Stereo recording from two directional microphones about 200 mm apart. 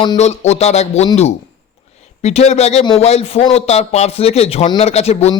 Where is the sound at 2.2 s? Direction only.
35° left (ahead or behind).